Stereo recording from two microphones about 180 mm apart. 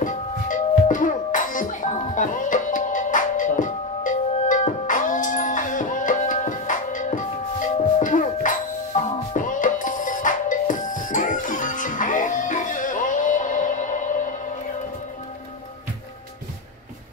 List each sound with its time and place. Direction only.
0.0 s music: 45° left (ahead or behind)